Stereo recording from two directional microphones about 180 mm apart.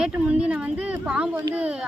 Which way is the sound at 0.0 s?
5° right (ahead or behind).